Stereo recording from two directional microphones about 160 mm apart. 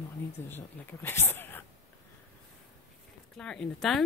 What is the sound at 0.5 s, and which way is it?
Speech, 15° left (ahead or behind).